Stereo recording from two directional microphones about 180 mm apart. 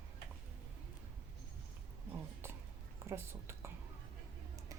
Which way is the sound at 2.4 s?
15° right (ahead or behind).